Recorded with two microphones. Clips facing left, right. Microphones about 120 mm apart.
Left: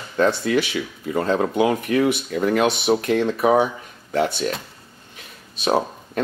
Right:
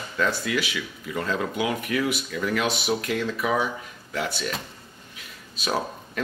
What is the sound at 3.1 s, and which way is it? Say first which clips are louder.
Speech: left 7 dB; 60° left (ahead or behind).